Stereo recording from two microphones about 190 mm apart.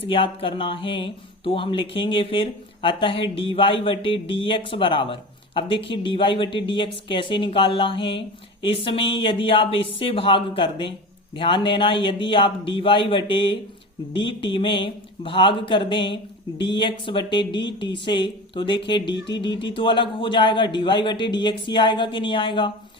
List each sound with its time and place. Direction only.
0.1 s speech: 25° left (ahead or behind)